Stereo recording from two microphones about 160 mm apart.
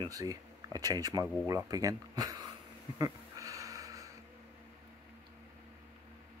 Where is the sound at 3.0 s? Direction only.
20° right (ahead or behind).